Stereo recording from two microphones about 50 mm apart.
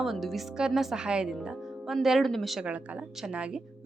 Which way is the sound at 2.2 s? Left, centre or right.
Centre.